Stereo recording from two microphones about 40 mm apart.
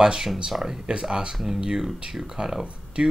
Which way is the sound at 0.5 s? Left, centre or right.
Right.